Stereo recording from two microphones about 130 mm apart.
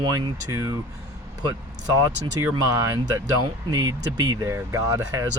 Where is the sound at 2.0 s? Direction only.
30° right (ahead or behind).